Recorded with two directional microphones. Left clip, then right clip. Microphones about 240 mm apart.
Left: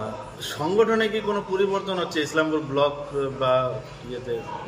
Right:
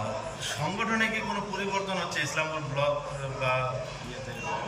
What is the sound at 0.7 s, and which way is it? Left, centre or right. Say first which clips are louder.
A man's voice: left 9 dB; left.